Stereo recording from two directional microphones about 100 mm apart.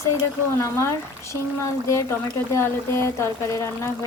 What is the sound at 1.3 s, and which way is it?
Speech, 30° left (ahead or behind).